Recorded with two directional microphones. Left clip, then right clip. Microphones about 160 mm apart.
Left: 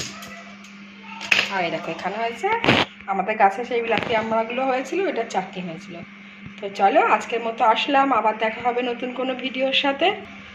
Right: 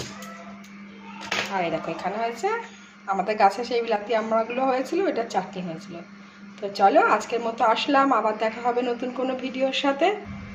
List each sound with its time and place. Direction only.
1.5 s a woman's voice: 10° right (ahead or behind)